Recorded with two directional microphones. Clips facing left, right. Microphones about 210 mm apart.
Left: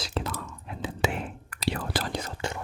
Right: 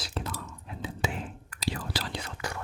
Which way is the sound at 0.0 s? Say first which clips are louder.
Left 4 dB; 85° left.